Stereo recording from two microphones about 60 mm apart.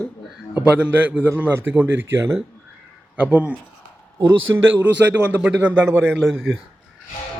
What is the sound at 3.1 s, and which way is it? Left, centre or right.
Speech, right.